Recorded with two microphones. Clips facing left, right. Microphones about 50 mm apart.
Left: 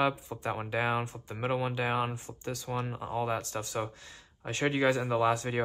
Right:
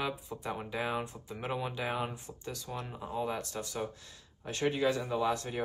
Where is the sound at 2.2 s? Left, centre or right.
Centre.